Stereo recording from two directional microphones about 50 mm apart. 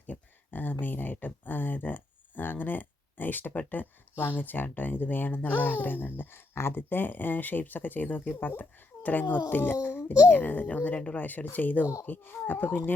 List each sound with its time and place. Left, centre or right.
0.1 s a child's voice: left